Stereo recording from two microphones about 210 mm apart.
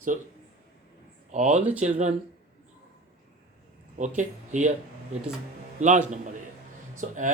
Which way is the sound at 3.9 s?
35° right (ahead or behind).